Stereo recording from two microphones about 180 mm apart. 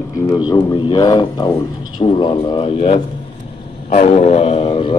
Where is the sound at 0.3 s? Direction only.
20° left (ahead or behind).